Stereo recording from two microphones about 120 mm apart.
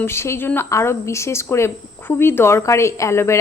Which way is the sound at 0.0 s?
20° left (ahead or behind).